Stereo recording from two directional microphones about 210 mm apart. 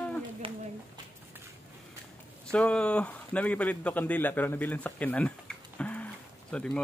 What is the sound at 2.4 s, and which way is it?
Speech, 5° left (ahead or behind).